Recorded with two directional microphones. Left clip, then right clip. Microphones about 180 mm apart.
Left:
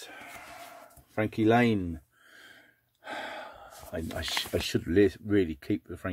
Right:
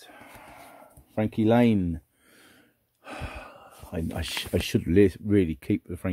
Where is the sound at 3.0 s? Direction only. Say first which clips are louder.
Left 2 dB; 40° right (ahead or behind).